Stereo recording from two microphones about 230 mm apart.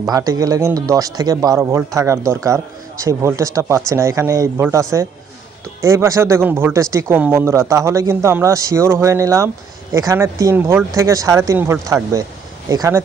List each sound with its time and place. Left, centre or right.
0.1 s speech: centre